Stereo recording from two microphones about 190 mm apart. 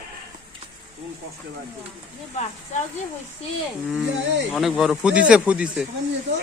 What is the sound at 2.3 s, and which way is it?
Speech, 35° left (ahead or behind).